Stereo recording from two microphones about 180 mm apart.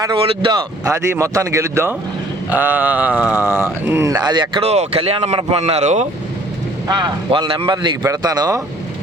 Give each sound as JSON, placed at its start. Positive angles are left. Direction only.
{"t": 0.0, "sound": "speech", "side_deg": -20}
{"t": 3.2, "sound": "speech", "side_deg": 15}
{"t": 3.5, "sound": "a man's voice", "side_deg": -15}
{"t": 6.8, "sound": "a man's voice", "side_deg": -25}